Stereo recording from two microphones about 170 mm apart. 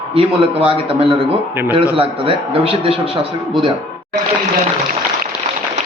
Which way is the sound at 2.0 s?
35° right (ahead or behind).